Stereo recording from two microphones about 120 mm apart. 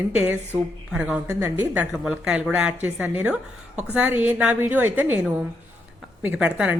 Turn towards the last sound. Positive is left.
turn(degrees=-10)  # may be behind; listen again after turning